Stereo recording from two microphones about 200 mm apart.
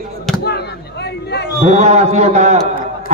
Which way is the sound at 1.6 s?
35° right (ahead or behind).